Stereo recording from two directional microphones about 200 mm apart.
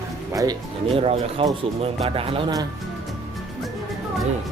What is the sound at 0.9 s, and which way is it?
Speech, 25° right (ahead or behind).